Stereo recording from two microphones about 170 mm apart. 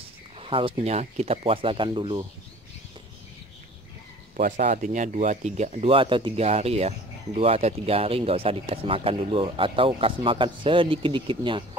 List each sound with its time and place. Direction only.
0.4 s speech: 30° right (ahead or behind)
4.4 s speech: 50° right (ahead or behind); by 11.6 s 30° right (ahead or behind)